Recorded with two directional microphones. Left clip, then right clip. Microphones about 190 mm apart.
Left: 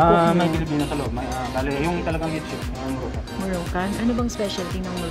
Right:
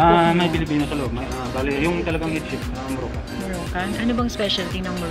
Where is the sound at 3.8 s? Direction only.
25° left (ahead or behind).